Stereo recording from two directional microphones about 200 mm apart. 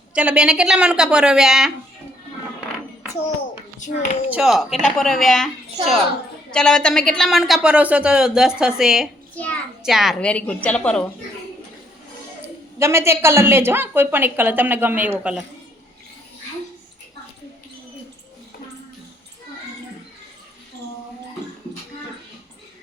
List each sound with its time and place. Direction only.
0.1 s a woman's voice: 5° right (ahead or behind)
3.8 s a child's voice: 40° left (ahead or behind)
4.3 s a woman's voice: centre (ahead or behind)
12.8 s a woman's voice: 15° right (ahead or behind)